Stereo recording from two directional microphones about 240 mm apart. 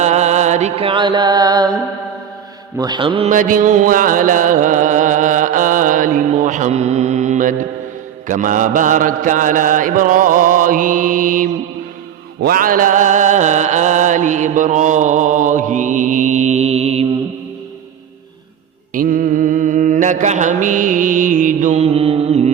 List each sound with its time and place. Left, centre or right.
0.0 s music: right
18.9 s mantra: right